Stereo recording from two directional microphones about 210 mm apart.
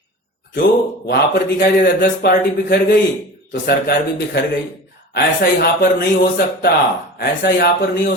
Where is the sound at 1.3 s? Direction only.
45° left (ahead or behind).